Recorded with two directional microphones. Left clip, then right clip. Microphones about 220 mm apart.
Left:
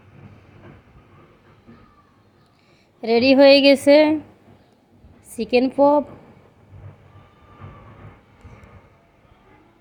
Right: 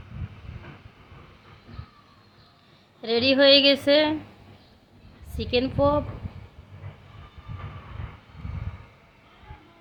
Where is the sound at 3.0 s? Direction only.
30° left (ahead or behind).